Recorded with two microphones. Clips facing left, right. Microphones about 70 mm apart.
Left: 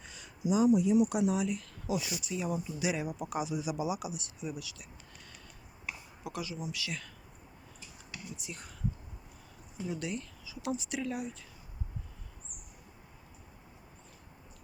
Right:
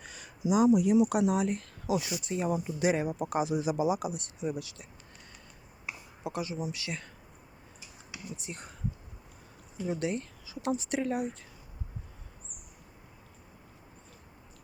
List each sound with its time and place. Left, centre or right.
0.0 s a sound: right
0.5 s speech: right
1.3 s speech: right
5.8 s a sound: right
6.5 s speech: right
8.4 s speech: right
9.8 s speech: right